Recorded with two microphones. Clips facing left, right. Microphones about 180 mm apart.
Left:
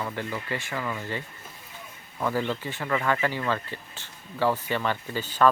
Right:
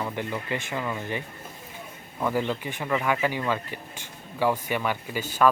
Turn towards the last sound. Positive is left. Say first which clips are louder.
# even
turn(degrees=-10)  # may be behind; listen again after turning